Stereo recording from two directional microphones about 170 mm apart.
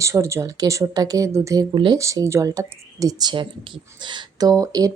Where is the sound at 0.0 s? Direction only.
15° right (ahead or behind).